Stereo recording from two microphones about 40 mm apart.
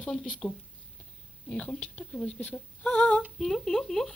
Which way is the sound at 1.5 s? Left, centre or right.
Left.